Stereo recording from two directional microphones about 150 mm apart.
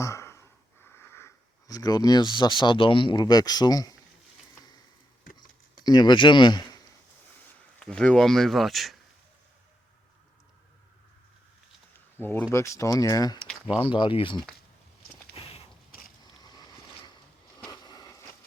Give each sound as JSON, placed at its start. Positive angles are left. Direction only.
{"t": 0.0, "sound": "wheeze", "side_deg": 20}
{"t": 0.9, "sound": "speech", "side_deg": 15}
{"t": 5.8, "sound": "speech", "side_deg": 30}
{"t": 7.8, "sound": "speech", "side_deg": 5}
{"t": 12.1, "sound": "speech", "side_deg": 15}
{"t": 13.8, "sound": "speech", "side_deg": 35}
{"t": 15.4, "sound": "a sound", "side_deg": 40}
{"t": 16.4, "sound": "boat", "side_deg": 25}
{"t": 17.7, "sound": "a sound", "side_deg": 25}